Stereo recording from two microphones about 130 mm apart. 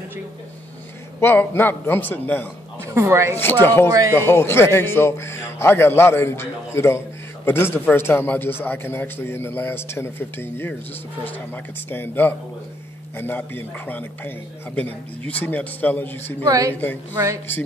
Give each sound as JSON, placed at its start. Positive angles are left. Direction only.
{"t": 1.2, "sound": "a man's voice", "side_deg": 15}
{"t": 2.8, "sound": "speech", "side_deg": -20}
{"t": 3.3, "sound": "a man's voice", "side_deg": 15}
{"t": 16.4, "sound": "a woman's voice", "side_deg": -25}
{"t": 16.7, "sound": "a man's voice", "side_deg": 15}
{"t": 17.1, "sound": "a woman's voice", "side_deg": -20}